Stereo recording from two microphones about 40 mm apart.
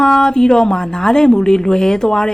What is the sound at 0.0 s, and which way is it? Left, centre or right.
Speech, centre.